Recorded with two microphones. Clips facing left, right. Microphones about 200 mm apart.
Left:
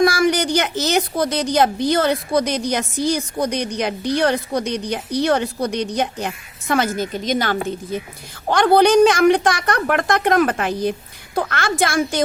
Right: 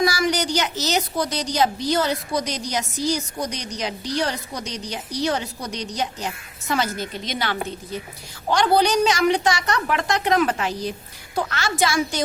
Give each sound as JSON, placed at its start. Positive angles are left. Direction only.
{"t": 0.0, "sound": "a woman's voice", "side_deg": 55}